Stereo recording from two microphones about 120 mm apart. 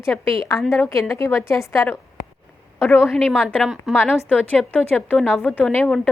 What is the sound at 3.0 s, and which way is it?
A woman's voice, centre (ahead or behind).